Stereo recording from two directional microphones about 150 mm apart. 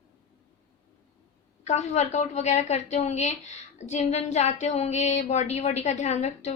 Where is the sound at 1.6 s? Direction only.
50° left (ahead or behind).